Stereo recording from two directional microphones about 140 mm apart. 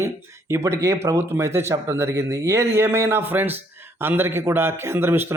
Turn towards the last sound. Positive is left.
turn(degrees=-15)  # may be behind; listen again after turning